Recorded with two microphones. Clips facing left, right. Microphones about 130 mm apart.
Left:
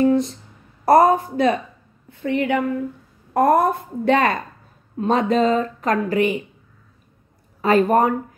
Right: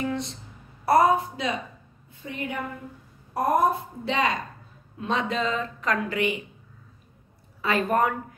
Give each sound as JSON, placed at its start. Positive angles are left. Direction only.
{"t": 0.0, "sound": "a woman's voice", "side_deg": 40}
{"t": 2.0, "sound": "a woman's voice", "side_deg": 70}
{"t": 7.6, "sound": "speech", "side_deg": 45}